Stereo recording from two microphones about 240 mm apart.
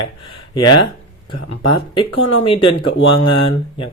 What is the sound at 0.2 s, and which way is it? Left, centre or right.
Speech, centre.